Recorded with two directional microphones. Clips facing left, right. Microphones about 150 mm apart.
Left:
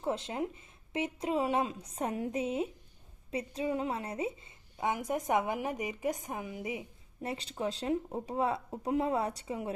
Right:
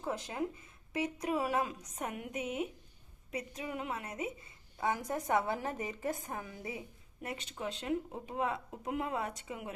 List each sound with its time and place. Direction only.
0.0 s a woman's voice: 25° left (ahead or behind)
7.3 s speech: 35° left (ahead or behind)